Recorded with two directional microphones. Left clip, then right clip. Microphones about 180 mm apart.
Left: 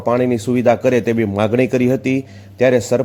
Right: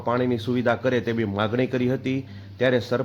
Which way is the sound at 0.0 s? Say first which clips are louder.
Left 8 dB; 40° left (ahead or behind).